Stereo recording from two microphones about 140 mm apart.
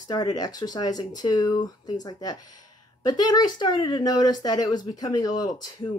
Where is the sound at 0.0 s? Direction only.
30° left (ahead or behind).